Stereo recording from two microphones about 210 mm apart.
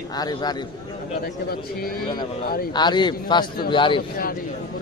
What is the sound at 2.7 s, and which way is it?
A man's voice, 20° left (ahead or behind).